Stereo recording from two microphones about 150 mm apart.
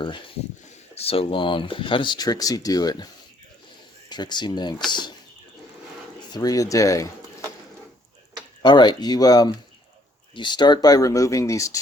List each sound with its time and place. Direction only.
0.9 s speech: 40° left (ahead or behind)
4.1 s speech: 30° left (ahead or behind)
6.3 s speech: 25° left (ahead or behind)
8.6 s speech: 30° left (ahead or behind)